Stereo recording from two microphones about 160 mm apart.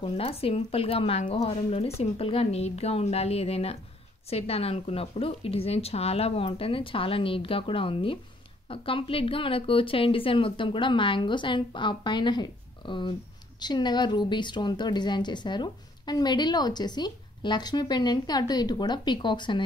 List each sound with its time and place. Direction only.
0.0 s a woman's voice: 35° left (ahead or behind)